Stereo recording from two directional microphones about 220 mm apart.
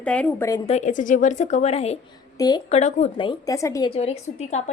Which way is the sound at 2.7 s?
30° left (ahead or behind).